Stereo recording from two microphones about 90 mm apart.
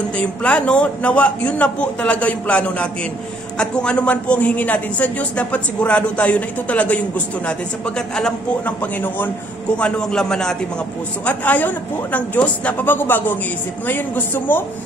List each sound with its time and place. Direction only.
0.2 s a man's voice: 10° left (ahead or behind)
11.2 s a man's voice: 15° left (ahead or behind)